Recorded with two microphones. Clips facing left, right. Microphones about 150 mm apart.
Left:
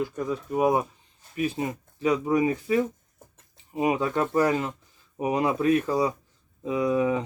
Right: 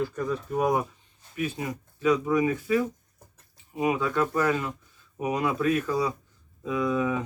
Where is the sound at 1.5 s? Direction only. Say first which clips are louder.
Left 3 dB; 30° left (ahead or behind).